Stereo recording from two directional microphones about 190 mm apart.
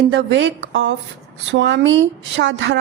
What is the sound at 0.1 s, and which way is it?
A woman's voice, 70° right (ahead or behind).